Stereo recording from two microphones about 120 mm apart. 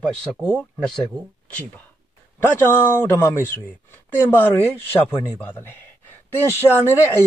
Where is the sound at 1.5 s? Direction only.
10° left (ahead or behind).